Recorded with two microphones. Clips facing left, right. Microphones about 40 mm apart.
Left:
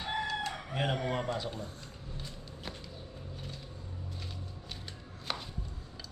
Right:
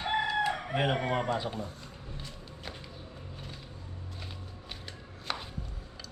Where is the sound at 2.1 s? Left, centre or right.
Centre.